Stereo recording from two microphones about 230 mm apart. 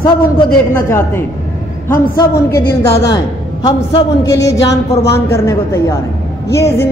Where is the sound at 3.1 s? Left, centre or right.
Centre.